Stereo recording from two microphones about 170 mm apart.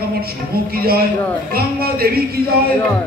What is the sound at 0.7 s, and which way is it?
A man's voice, 60° right (ahead or behind).